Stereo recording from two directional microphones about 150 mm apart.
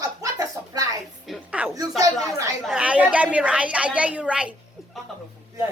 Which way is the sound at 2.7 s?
10° right (ahead or behind).